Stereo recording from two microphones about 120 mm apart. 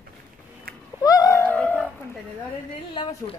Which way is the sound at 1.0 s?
30° left (ahead or behind).